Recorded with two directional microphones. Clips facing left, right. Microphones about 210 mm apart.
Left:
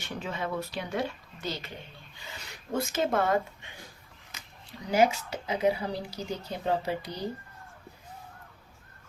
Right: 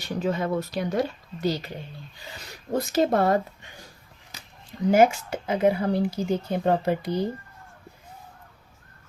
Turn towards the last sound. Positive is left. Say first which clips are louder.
# right 7 dB
turn(degrees=-55)  # may be behind; listen again after turning